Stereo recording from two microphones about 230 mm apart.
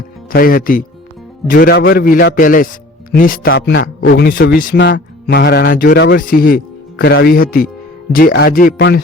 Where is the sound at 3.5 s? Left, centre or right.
Left.